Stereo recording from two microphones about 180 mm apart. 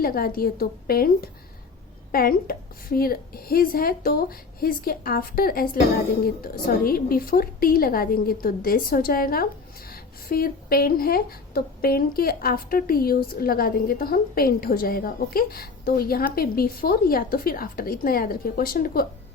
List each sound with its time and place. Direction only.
0.0 s a woman's voice: 55° left (ahead or behind)